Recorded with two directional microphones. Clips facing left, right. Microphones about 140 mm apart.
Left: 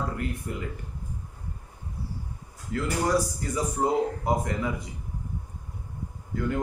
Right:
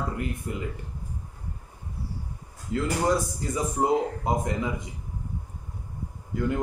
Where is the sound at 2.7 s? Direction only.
25° right (ahead or behind).